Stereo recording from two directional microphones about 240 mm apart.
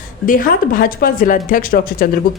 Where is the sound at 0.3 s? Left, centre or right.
Left.